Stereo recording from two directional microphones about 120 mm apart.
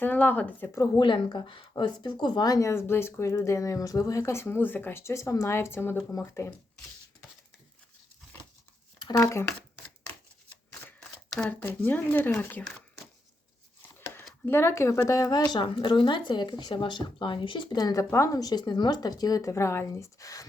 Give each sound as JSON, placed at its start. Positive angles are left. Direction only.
{"t": 0.0, "sound": "speech", "side_deg": 15}
{"t": 0.9, "sound": "speech", "side_deg": 40}
{"t": 9.3, "sound": "speech", "side_deg": 20}
{"t": 11.3, "sound": "speech", "side_deg": 15}
{"t": 14.4, "sound": "speech", "side_deg": 20}
{"t": 15.5, "sound": "speech", "side_deg": 40}